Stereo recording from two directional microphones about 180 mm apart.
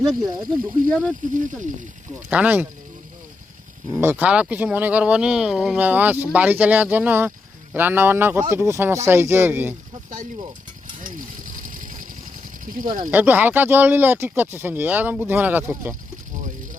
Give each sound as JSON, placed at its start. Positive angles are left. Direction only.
{"t": 0.2, "sound": "speech", "side_deg": -20}
{"t": 0.9, "sound": "speech", "side_deg": 5}
{"t": 1.3, "sound": "speech", "side_deg": -45}
{"t": 2.3, "sound": "speech", "side_deg": -10}
{"t": 3.9, "sound": "speech", "side_deg": -10}
{"t": 11.2, "sound": "a sound", "side_deg": -50}
{"t": 12.6, "sound": "speech", "side_deg": -50}
{"t": 13.1, "sound": "speech", "side_deg": -10}